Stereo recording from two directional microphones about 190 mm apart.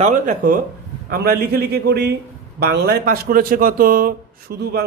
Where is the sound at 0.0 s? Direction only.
40° right (ahead or behind).